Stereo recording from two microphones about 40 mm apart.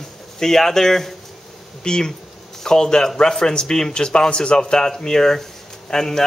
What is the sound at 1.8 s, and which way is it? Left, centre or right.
Speech, centre.